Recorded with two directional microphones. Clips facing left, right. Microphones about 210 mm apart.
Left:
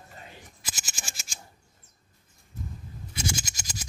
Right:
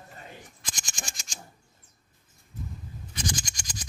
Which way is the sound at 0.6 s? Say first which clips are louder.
Left 1 dB; 5° left (ahead or behind).